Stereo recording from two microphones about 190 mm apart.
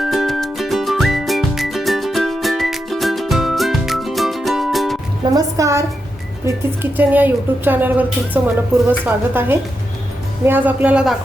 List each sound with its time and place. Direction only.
0.0 s music: centre (ahead or behind)
5.3 s speech: 15° right (ahead or behind)
6.9 s speech: 10° right (ahead or behind)